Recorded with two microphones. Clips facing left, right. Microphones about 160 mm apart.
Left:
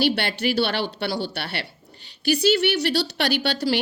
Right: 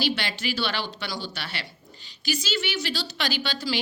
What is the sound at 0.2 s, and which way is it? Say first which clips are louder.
A woman's voice: left 7 dB; 60° left (ahead or behind).